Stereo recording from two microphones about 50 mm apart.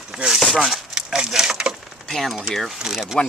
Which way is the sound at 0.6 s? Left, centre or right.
Centre.